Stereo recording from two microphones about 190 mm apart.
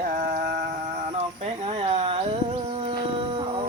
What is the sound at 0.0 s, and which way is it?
Music, 45° right (ahead or behind).